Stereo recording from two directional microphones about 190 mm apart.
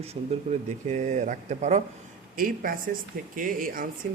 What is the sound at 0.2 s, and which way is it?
Speech, 35° right (ahead or behind).